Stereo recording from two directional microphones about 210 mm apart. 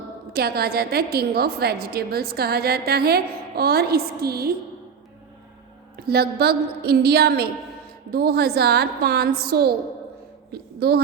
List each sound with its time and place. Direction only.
0.3 s a woman's voice: 50° right (ahead or behind)
6.0 s a woman's voice: 50° right (ahead or behind)